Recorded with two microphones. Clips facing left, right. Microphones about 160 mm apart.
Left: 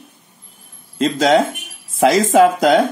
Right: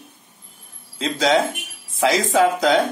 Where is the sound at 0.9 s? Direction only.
50° left (ahead or behind).